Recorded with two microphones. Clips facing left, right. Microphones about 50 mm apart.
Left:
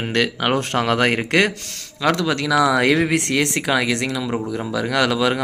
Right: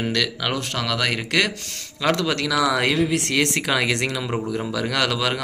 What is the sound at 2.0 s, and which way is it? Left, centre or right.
Speech, centre.